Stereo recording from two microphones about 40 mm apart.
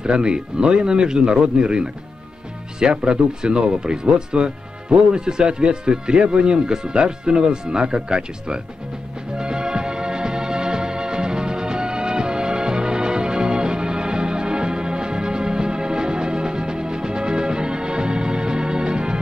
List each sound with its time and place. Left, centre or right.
0.0 s speech: right
9.4 s organ: right